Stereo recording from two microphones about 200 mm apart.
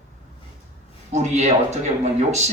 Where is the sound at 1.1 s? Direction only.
35° right (ahead or behind).